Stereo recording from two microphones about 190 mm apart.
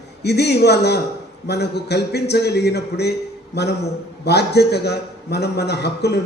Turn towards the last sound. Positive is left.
turn(degrees=60)  # may be behind; listen again after turning